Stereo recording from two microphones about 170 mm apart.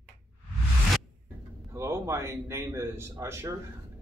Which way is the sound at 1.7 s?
15° right (ahead or behind).